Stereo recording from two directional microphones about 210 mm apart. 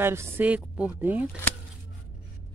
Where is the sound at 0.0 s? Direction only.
10° right (ahead or behind).